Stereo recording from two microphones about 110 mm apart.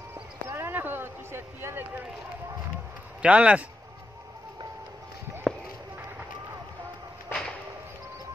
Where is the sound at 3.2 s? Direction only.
10° right (ahead or behind).